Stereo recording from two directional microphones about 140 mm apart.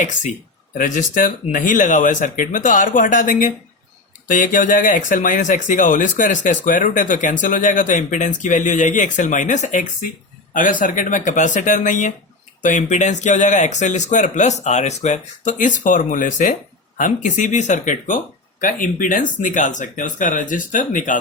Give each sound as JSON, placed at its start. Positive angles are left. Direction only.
{"t": 0.0, "sound": "speech", "side_deg": 65}